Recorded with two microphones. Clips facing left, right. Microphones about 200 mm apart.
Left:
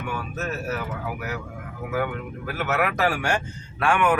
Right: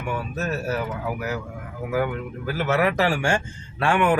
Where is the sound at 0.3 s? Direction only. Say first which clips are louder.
Right 2 dB; 30° right (ahead or behind).